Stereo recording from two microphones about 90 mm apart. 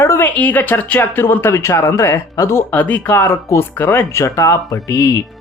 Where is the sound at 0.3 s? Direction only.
20° left (ahead or behind).